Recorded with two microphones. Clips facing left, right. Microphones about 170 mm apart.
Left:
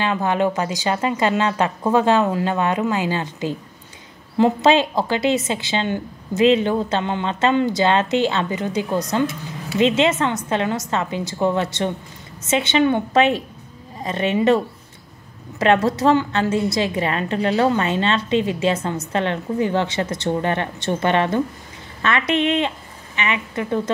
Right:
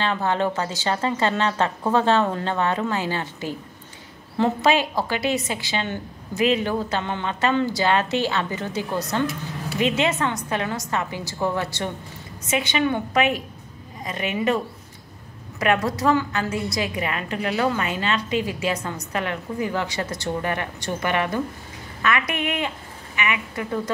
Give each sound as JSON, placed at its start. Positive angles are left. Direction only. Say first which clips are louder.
{"t": 0.0, "sound": "a woman's voice", "louder": "left 3 dB", "side_deg": 15}
{"t": 15.6, "sound": "a woman's voice", "louder": "left 5 dB", "side_deg": 25}